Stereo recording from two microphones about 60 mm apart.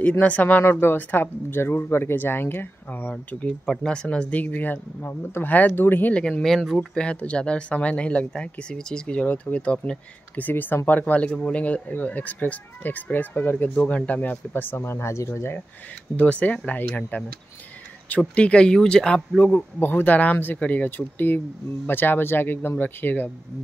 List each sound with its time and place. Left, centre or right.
0.2 s speech: left
3.8 s speech: centre; by 6.1 s left
6.4 s speech: centre
7.0 s speech: centre
9.2 s speech: left
10.4 s speech: left
14.5 s speech: left
16.2 s speech: left
18.2 s speech: centre
19.4 s speech: left